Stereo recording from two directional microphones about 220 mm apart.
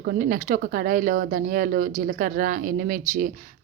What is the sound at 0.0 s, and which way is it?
Speech, 40° right (ahead or behind).